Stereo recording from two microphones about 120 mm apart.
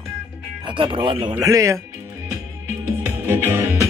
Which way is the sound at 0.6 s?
45° right (ahead or behind).